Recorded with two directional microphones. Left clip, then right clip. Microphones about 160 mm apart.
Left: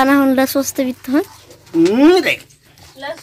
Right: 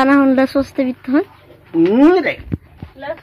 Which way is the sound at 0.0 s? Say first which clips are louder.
Even; 5° left (ahead or behind).